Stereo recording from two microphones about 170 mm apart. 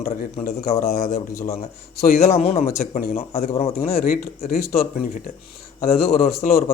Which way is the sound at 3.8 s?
60° left (ahead or behind).